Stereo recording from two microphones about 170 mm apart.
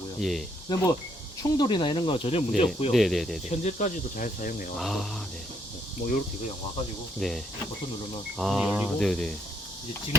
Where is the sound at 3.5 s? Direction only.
45° left (ahead or behind).